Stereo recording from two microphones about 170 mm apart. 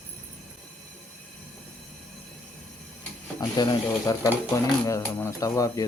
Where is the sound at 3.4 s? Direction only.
25° left (ahead or behind).